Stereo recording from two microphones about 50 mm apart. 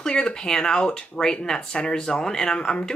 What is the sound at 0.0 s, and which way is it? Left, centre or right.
Speech, centre.